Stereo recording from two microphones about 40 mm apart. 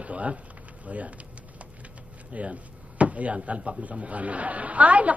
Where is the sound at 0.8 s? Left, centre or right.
Right.